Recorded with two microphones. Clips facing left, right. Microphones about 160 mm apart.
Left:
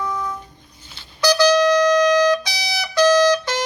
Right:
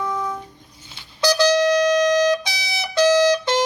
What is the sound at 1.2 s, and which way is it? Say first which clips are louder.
Brass instrument: left 2 dB; 25° right (ahead or behind).